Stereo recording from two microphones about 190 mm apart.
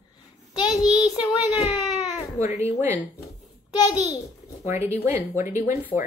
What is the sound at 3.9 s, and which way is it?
Speech, 20° left (ahead or behind).